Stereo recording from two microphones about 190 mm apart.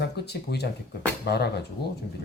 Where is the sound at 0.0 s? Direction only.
60° left (ahead or behind).